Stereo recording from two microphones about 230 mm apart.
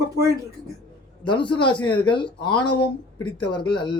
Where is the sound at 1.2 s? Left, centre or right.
Left.